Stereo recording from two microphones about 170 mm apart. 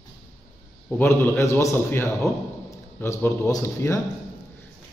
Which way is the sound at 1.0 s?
15° left (ahead or behind).